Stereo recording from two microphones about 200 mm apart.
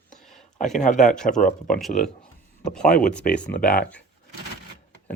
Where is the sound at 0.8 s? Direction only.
40° left (ahead or behind).